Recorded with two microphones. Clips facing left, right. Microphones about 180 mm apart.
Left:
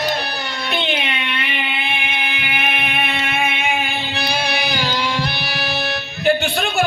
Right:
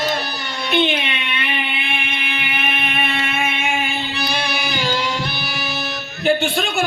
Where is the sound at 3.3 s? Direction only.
65° left (ahead or behind).